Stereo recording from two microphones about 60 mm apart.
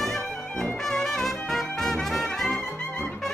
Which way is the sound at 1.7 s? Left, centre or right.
Centre.